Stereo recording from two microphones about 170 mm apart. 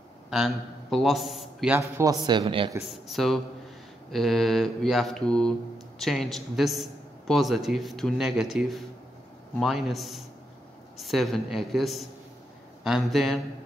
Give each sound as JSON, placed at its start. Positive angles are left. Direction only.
{"t": 0.3, "sound": "a man's voice", "side_deg": 0}
{"t": 1.8, "sound": "a man's voice", "side_deg": -15}
{"t": 2.2, "sound": "speech", "side_deg": -30}
{"t": 2.8, "sound": "a man's voice", "side_deg": 0}